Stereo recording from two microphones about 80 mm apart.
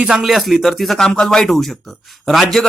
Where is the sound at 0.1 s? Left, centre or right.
Centre.